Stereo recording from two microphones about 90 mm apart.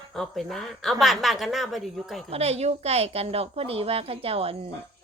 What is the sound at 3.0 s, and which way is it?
A woman's voice, 90° right.